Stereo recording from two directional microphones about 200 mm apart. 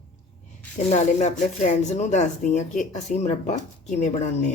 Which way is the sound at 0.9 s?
35° left (ahead or behind).